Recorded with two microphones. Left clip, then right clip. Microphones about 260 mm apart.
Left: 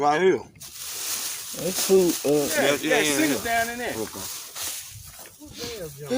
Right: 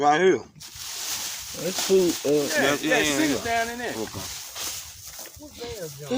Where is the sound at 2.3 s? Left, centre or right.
Centre.